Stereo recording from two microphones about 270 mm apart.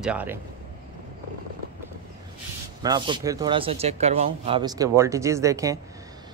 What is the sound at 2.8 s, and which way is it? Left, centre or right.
Speech, centre.